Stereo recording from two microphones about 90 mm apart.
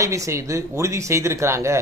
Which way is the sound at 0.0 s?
35° right (ahead or behind).